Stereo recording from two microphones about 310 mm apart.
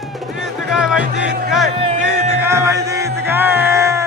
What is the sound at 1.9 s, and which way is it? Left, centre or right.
Music, right.